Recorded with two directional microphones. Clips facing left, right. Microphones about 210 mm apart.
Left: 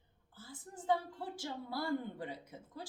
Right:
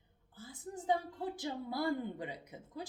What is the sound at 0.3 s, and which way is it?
A woman's voice, 15° right (ahead or behind).